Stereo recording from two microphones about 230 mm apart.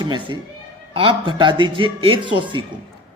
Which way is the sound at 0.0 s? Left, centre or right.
Centre.